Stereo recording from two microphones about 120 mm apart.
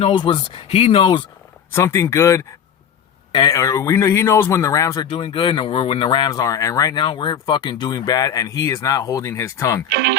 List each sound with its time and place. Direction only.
0.0 s speech: 45° left (ahead or behind)
1.7 s speech: 25° left (ahead or behind)
5.0 s speech: 45° left (ahead or behind); by 7.0 s 30° left (ahead or behind)
7.0 s speech: 40° left (ahead or behind); by 9.8 s 25° left (ahead or behind)